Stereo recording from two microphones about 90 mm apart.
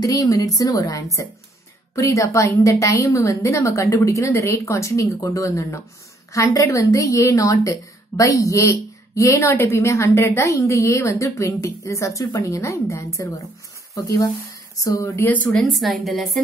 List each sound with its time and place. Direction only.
0.0 s a woman's voice: 40° left (ahead or behind)
15.2 s speech: 15° left (ahead or behind)
15.5 s a woman's voice: centre (ahead or behind)